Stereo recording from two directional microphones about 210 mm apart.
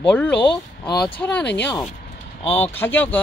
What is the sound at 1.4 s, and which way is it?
Speech, 55° left (ahead or behind).